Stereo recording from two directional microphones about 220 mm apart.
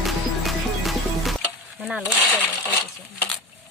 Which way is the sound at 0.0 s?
Centre (ahead or behind).